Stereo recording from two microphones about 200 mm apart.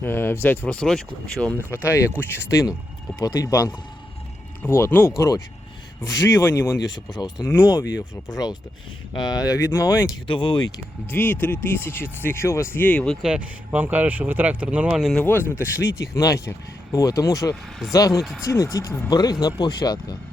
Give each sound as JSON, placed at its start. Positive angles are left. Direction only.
{"t": 0.0, "sound": "speech", "side_deg": 10}
{"t": 1.7, "sound": "speech", "side_deg": 15}
{"t": 9.1, "sound": "speech", "side_deg": 20}
{"t": 10.2, "sound": "speech", "side_deg": 25}
{"t": 11.1, "sound": "speech", "side_deg": 10}
{"t": 13.2, "sound": "speech", "side_deg": -5}
{"t": 17.5, "sound": "speech", "side_deg": 0}
{"t": 18.4, "sound": "speech", "side_deg": 15}